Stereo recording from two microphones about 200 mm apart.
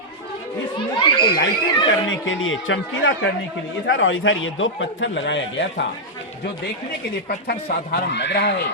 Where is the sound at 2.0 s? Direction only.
70° left (ahead or behind).